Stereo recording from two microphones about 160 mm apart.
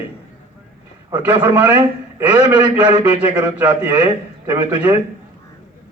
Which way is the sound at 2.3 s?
25° right (ahead or behind).